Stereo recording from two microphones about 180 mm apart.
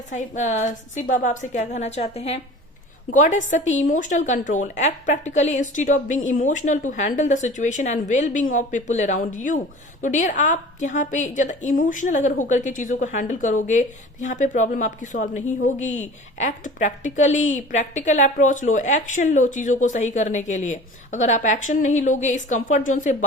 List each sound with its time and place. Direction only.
0.1 s a woman's voice: 45° left (ahead or behind)